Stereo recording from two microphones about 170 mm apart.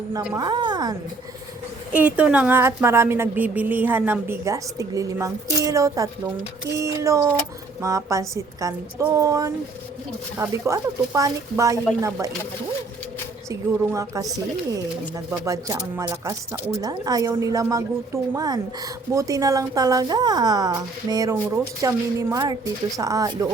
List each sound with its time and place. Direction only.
0.3 s a woman's voice: 25° right (ahead or behind)
1.9 s a woman's voice: 10° right (ahead or behind)
13.5 s a woman's voice: 20° right (ahead or behind)